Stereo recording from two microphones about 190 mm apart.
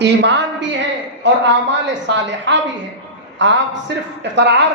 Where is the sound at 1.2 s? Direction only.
70° right (ahead or behind).